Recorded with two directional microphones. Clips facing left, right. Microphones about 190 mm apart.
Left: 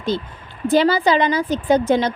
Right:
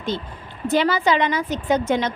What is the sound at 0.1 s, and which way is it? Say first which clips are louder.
A woman's voice: left 4 dB; 35° left (ahead or behind).